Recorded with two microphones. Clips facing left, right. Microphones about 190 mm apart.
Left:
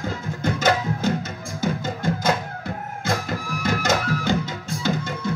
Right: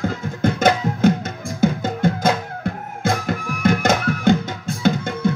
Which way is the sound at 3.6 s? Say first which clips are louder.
Right 5 dB; 55° right (ahead or behind).